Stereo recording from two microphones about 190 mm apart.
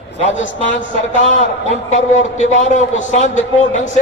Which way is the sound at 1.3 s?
35° left (ahead or behind).